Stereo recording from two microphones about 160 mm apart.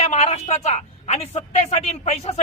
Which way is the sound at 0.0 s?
45° left (ahead or behind).